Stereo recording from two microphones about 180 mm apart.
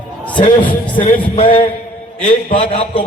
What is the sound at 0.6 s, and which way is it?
A man's voice, 30° left (ahead or behind).